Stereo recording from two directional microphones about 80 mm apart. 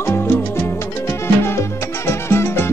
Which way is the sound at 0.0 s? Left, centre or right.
Left.